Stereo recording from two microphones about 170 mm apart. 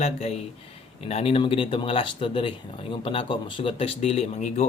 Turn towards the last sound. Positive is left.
turn(degrees=40)  # may be behind; listen again after turning